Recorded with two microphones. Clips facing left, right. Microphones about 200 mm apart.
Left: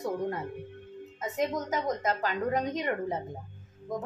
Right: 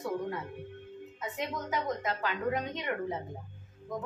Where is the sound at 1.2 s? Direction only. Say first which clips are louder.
Left 6 dB; 40° left (ahead or behind).